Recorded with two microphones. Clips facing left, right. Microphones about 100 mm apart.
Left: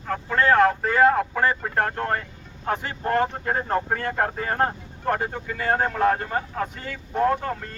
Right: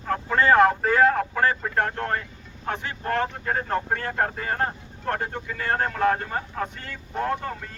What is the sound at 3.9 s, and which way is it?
Speech, 5° left (ahead or behind).